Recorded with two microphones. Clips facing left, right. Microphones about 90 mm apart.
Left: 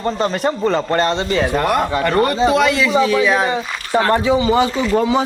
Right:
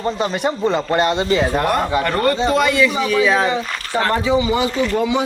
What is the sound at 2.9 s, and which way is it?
Speech, 20° left (ahead or behind).